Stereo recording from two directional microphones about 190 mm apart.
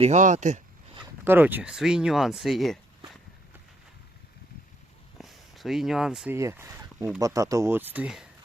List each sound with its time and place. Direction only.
0.0 s speech: 40° right (ahead or behind)
1.2 s speech: 10° right (ahead or behind)
5.1 s a sound: centre (ahead or behind)
6.3 s speech: 15° right (ahead or behind)